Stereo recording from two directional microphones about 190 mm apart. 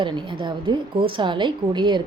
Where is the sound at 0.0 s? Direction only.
25° right (ahead or behind).